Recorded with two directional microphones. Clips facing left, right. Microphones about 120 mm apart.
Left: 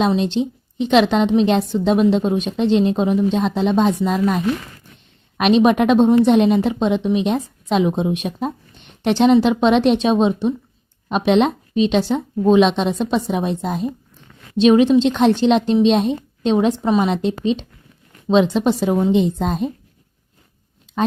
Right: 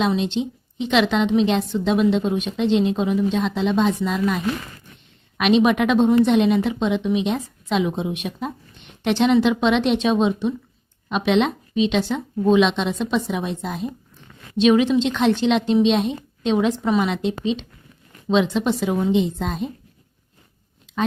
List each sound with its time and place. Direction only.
0.2 s a woman's voice: 40° left (ahead or behind)